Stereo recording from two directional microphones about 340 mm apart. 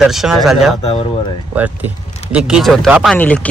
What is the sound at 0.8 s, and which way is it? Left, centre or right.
Speech, centre.